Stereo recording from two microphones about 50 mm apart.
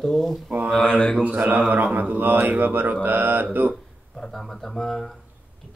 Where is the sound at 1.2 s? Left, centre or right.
Right.